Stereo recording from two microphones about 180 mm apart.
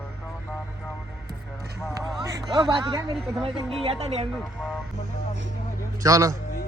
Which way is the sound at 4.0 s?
35° right (ahead or behind).